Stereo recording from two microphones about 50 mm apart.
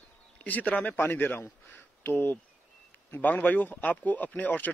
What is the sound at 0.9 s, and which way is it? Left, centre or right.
A man's voice, left.